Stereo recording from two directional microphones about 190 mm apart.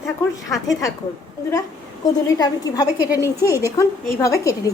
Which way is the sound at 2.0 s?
20° left (ahead or behind).